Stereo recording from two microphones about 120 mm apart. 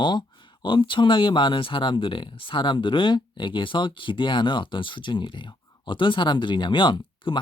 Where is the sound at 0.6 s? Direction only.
45° left (ahead or behind).